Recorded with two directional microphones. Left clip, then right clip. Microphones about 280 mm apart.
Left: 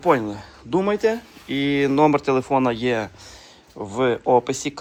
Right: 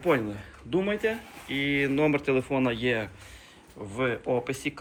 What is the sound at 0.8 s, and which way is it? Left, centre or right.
Speech, left.